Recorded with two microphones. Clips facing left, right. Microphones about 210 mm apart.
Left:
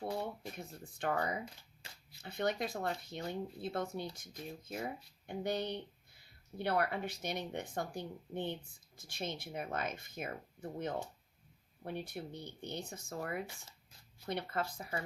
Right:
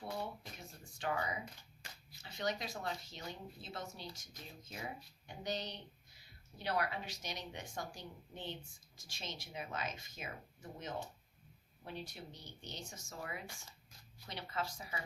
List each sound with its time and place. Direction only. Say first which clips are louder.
0.5 s speech: left 6 dB; 55° left (ahead or behind)